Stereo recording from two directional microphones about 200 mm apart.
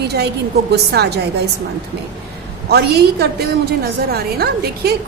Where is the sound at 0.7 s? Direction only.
55° right (ahead or behind).